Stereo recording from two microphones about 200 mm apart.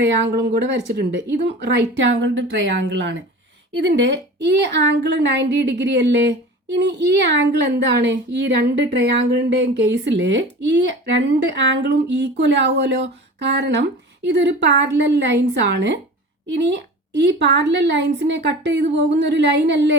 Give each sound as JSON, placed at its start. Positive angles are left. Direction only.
{"t": 0.0, "sound": "speech", "side_deg": -60}
{"t": 16.5, "sound": "speech", "side_deg": -60}